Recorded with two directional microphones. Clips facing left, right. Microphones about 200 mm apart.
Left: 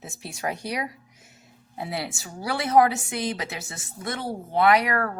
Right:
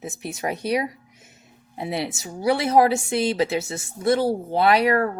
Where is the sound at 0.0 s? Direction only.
20° right (ahead or behind).